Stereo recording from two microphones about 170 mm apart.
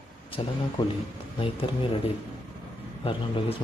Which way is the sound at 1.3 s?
30° left (ahead or behind).